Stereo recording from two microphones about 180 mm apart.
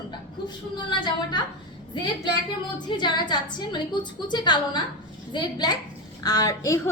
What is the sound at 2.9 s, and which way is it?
A woman's voice, 25° left (ahead or behind).